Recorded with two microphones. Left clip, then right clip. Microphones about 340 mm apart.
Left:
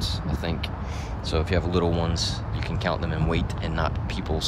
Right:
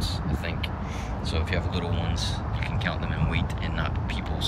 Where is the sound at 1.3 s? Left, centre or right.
Centre.